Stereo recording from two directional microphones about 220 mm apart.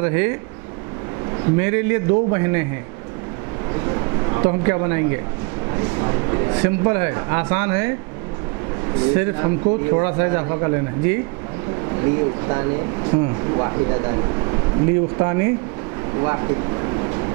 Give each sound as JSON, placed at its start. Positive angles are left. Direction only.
{"t": 0.0, "sound": "a man's voice", "side_deg": -10}
{"t": 1.6, "sound": "a man's voice", "side_deg": -10}
{"t": 3.7, "sound": "a sound", "side_deg": -20}
{"t": 5.7, "sound": "a man's voice", "side_deg": -20}
{"t": 9.1, "sound": "a man's voice", "side_deg": -10}
{"t": 16.2, "sound": "a sound", "side_deg": -20}